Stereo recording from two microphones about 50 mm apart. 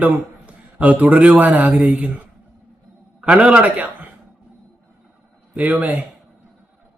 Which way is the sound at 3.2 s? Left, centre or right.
Centre.